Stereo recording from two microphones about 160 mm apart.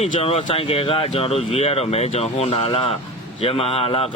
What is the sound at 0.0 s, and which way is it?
Speech, 35° left (ahead or behind).